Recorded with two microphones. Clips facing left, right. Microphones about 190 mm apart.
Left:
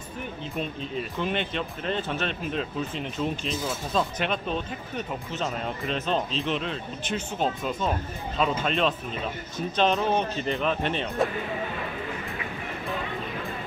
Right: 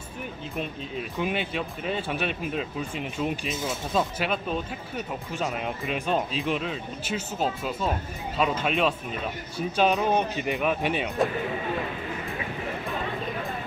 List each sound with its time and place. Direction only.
1.1 s speech: 5° right (ahead or behind)